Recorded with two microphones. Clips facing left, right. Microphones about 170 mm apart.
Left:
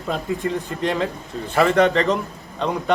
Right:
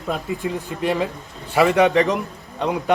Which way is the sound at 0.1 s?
5° right (ahead or behind).